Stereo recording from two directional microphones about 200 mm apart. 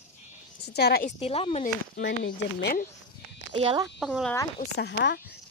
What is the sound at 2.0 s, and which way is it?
Speech, 65° left (ahead or behind).